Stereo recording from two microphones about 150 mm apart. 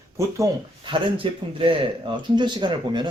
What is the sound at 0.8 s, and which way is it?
Speech, 35° right (ahead or behind).